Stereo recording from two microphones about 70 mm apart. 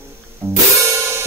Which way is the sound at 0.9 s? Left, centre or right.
Right.